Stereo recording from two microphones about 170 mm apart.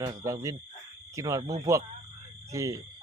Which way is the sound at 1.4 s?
35° right (ahead or behind).